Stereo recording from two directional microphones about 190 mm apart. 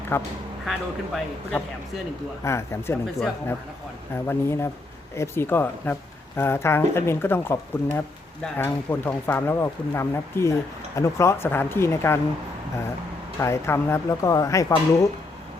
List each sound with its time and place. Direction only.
0.1 s speech: 10° left (ahead or behind)
0.6 s speech: centre (ahead or behind)
2.4 s speech: 15° left (ahead or behind)
4.1 s speech: 15° left (ahead or behind)
13.4 s speech: 15° left (ahead or behind)